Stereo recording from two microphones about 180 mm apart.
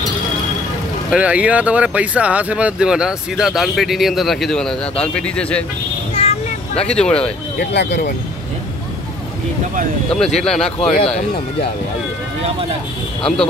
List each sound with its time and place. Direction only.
1.1 s speech: 5° right (ahead or behind)
6.1 s vehicle: 35° left (ahead or behind)
6.9 s speech: 5° left (ahead or behind)
7.5 s speech: 70° left (ahead or behind)
10.1 s speech: 5° left (ahead or behind)
10.8 s speech: 30° left (ahead or behind)